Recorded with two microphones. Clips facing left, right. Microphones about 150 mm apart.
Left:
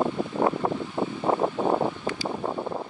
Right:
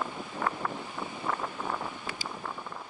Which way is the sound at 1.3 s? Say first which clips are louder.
Left 11 dB; 55° left (ahead or behind).